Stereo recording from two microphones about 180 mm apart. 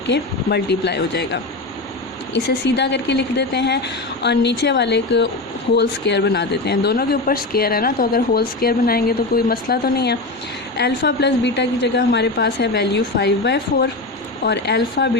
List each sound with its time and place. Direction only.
0.1 s a woman's voice: 70° left (ahead or behind)